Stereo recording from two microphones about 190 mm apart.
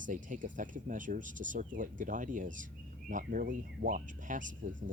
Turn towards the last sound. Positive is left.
turn(degrees=-45)  # may be behind; listen again after turning